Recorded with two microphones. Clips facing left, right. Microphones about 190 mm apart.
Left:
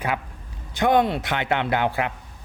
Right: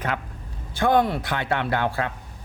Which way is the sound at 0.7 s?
20° left (ahead or behind).